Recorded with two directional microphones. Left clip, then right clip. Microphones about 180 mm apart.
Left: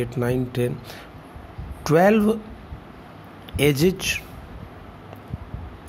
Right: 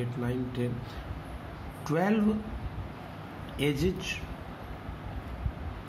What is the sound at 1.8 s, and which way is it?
Speech, 65° left (ahead or behind).